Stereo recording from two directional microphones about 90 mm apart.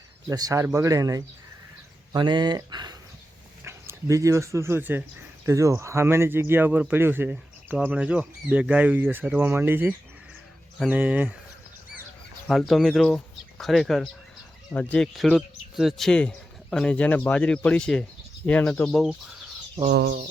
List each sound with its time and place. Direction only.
0.3 s speech: 40° right (ahead or behind)
2.1 s speech: 55° right (ahead or behind)
3.6 s speech: 30° right (ahead or behind)
5.5 s speech: 35° right (ahead or behind); by 11.3 s 20° right (ahead or behind)
12.5 s speech: centre (ahead or behind)
14.7 s speech: 15° left (ahead or behind)
15.0 s speech: 5° left (ahead or behind)